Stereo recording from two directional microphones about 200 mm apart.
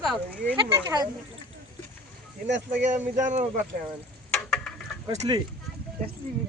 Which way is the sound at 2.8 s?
35° right (ahead or behind).